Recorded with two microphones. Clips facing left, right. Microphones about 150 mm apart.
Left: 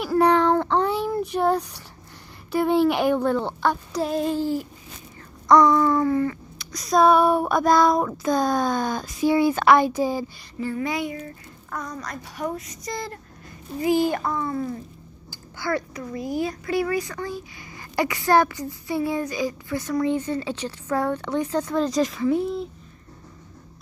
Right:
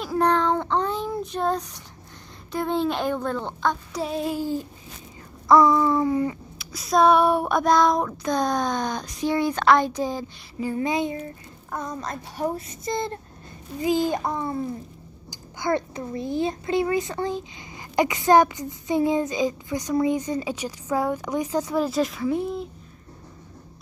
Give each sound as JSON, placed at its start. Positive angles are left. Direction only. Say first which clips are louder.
{"t": 0.0, "sound": "child singing", "louder": "left 3 dB", "side_deg": 10}
{"t": 5.5, "sound": "speech", "louder": "left 1 dB", "side_deg": -5}
{"t": 5.9, "sound": "a woman's voice", "louder": "left 1 dB", "side_deg": -15}
{"t": 6.6, "sound": "speech", "louder": "left 1 dB", "side_deg": 0}
{"t": 10.6, "sound": "a child's voice", "louder": "right 2 dB", "side_deg": -20}